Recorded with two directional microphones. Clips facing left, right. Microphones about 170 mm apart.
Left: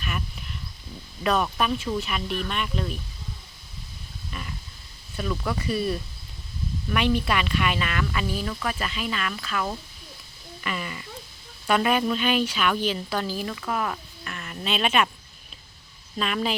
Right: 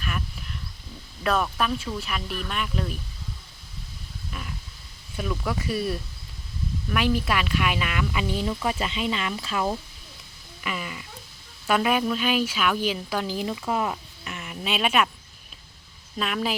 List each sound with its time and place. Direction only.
1.2 s speech: centre (ahead or behind)
4.3 s a sound: centre (ahead or behind)
5.1 s a woman's voice: 5° right (ahead or behind); by 9.7 s 25° right (ahead or behind)
10.6 s a sound: 5° right (ahead or behind)
11.6 s a woman's voice: 5° right (ahead or behind)
16.1 s speech: 5° right (ahead or behind)